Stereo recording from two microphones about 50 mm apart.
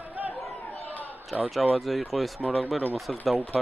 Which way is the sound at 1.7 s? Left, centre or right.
Centre.